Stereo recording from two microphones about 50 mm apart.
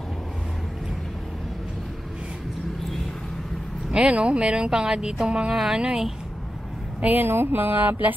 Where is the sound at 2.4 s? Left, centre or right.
Centre.